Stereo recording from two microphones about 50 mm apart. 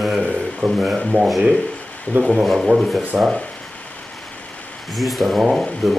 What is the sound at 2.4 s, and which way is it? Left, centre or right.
Speech, centre.